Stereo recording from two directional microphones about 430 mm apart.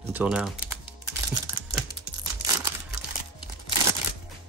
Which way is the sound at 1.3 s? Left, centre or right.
Centre.